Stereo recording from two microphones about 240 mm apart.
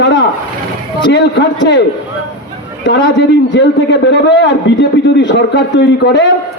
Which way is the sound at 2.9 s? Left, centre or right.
Left.